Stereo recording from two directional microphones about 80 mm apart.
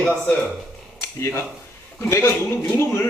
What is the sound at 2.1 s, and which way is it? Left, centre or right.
Speech, left.